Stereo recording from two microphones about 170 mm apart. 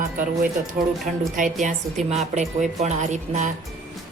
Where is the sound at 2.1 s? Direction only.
40° right (ahead or behind).